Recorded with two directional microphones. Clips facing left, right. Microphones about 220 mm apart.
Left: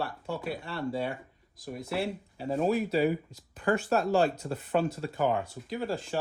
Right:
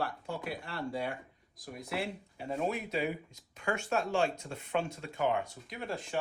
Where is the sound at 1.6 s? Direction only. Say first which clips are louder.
Left 5 dB; 30° left (ahead or behind).